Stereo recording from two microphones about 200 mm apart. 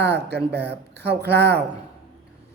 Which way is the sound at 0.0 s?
60° right (ahead or behind).